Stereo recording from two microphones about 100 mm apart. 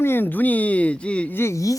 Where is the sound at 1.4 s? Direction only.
30° left (ahead or behind).